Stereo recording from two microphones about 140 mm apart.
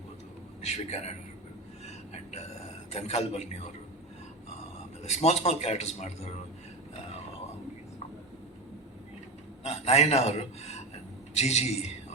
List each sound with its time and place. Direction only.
0.6 s a man's voice: 50° left (ahead or behind)
2.1 s a sound: 50° left (ahead or behind)
2.9 s a man's voice: 50° left (ahead or behind)
5.0 s a man's voice: 50° left (ahead or behind)
9.6 s a man's voice: 50° left (ahead or behind)